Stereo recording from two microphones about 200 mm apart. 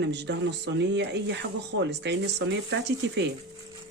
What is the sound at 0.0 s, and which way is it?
Speech, 60° right (ahead or behind).